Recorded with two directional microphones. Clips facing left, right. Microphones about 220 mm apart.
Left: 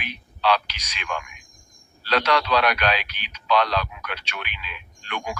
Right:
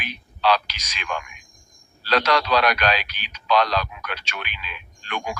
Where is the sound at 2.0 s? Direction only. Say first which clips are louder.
Right 1 dB; 40° right (ahead or behind).